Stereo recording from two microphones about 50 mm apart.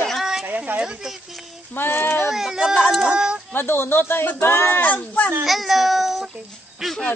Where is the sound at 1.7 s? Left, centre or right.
Left.